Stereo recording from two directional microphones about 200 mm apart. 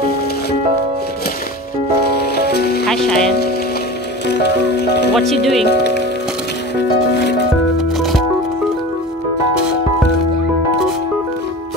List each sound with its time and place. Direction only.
2.0 s music: 55° left (ahead or behind)
2.9 s music: 5° left (ahead or behind)
4.3 s music: 55° left (ahead or behind)
5.1 s speech: centre (ahead or behind)
5.7 s speech: 55° left (ahead or behind)
7.7 s music: centre (ahead or behind)